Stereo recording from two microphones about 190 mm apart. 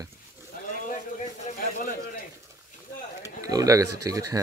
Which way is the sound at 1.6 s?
45° left (ahead or behind).